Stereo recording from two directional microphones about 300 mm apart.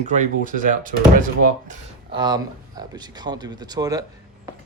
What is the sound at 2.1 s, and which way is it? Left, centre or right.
Speech, centre.